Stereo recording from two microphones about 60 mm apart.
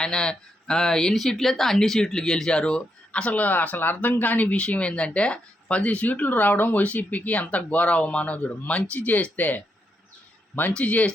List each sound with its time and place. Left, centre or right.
0.0 s speech: centre; by 9.6 s left
10.8 s speech: left